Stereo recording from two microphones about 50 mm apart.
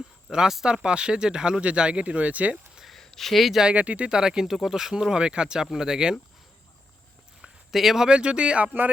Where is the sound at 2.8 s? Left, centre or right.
Centre.